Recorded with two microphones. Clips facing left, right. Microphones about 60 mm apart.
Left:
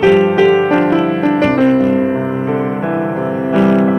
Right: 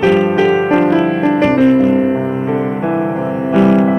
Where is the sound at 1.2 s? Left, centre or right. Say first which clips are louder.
Right 1 dB; centre.